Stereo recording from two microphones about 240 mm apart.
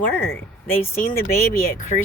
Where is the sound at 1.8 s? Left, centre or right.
Left.